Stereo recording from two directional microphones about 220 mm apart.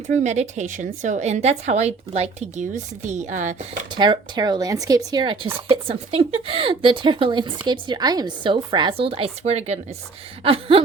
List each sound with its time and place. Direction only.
0.1 s a woman's voice: 30° right (ahead or behind)
3.9 s a woman's voice: 20° right (ahead or behind)